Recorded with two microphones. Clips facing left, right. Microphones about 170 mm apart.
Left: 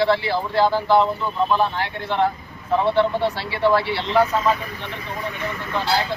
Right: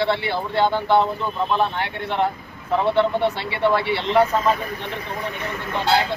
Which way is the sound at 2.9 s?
20° right (ahead or behind).